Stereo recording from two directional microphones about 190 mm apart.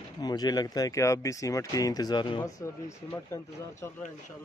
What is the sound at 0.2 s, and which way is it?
A man's voice, 20° left (ahead or behind).